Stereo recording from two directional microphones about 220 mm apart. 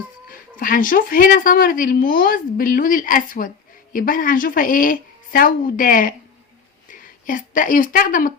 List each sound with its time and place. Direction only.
0.5 s a woman's voice: 40° left (ahead or behind)